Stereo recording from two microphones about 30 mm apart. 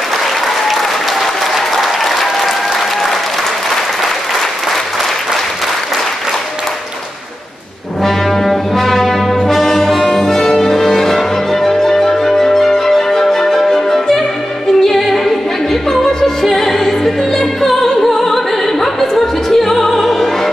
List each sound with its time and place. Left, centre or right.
0.7 s applause: centre
8.0 s brass instrument: centre
9.5 s music: centre
16.4 s opera: centre